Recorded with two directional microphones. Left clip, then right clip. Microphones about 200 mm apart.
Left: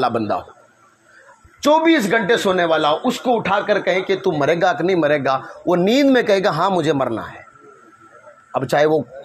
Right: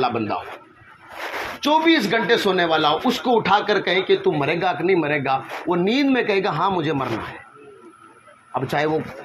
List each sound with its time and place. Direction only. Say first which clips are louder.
0.0 s speech: left 3 dB; 45° left (ahead or behind)
1.6 s speech: left 3 dB; 35° left (ahead or behind)
8.5 s speech: left 6 dB; 45° left (ahead or behind)